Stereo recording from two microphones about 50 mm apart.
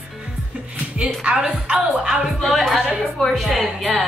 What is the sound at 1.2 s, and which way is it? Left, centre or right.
Speech, right.